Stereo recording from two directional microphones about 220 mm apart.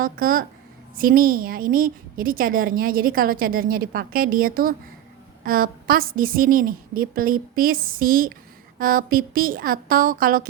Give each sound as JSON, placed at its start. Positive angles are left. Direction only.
{"t": 0.0, "sound": "a woman's voice", "side_deg": -40}